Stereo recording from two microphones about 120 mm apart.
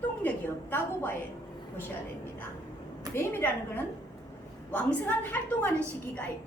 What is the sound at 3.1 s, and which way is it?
A woman's voice, 20° left (ahead or behind).